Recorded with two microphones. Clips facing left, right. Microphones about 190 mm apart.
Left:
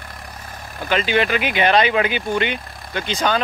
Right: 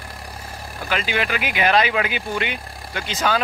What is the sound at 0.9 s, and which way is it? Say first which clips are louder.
Speech: left 5 dB; 5° right (ahead or behind).